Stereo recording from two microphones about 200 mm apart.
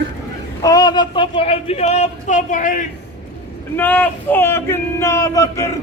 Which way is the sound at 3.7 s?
10° left (ahead or behind).